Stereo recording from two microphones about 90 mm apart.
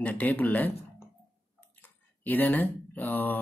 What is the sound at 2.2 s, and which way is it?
Speech, 20° left (ahead or behind).